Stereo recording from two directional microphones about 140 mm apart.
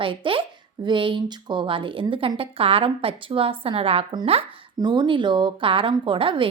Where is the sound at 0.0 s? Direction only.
35° right (ahead or behind).